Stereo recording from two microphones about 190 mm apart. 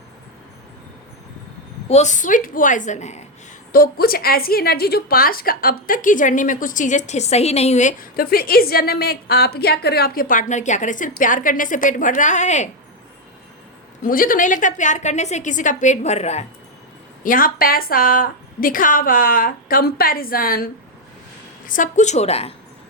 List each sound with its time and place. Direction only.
1.9 s a woman's voice: 40° left (ahead or behind)
3.7 s a woman's voice: 50° left (ahead or behind)
14.0 s a woman's voice: 45° left (ahead or behind)
17.2 s a woman's voice: 45° left (ahead or behind)
21.7 s a woman's voice: 40° left (ahead or behind)